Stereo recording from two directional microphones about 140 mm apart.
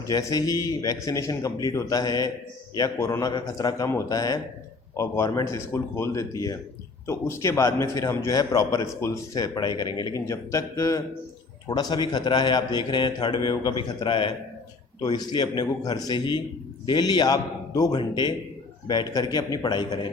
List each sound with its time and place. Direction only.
0.1 s a man's voice: 25° left (ahead or behind)